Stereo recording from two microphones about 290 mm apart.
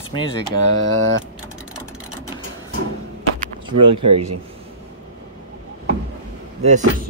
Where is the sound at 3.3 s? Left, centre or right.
Right.